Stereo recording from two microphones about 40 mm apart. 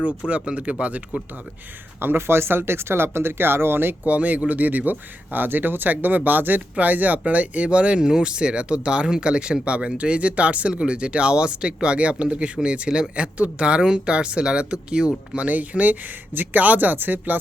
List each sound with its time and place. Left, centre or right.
0.3 s speech: right
2.0 s speech: right
4.0 s speech: right
15.4 s speech: right